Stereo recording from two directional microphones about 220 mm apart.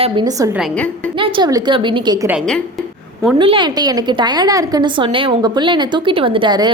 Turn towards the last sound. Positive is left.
turn(degrees=-20)  # may be behind; listen again after turning